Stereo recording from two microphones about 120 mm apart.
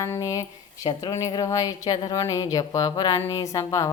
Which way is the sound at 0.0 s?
25° left (ahead or behind).